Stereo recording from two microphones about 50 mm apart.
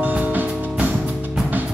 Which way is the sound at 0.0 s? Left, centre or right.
Right.